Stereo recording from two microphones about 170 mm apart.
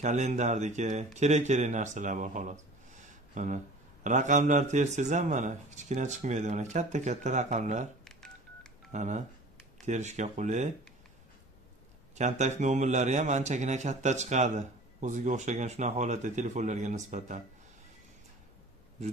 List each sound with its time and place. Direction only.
0.0 s speech: 45° right (ahead or behind)
8.0 s telephone dialing: 5° left (ahead or behind)
8.9 s speech: 45° right (ahead or behind)
12.2 s speech: 45° right (ahead or behind)